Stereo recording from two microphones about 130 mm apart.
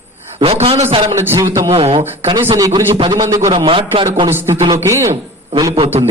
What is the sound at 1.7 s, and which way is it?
A man's voice, 50° right (ahead or behind).